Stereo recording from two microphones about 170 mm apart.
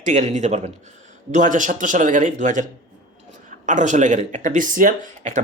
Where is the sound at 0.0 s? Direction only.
45° right (ahead or behind).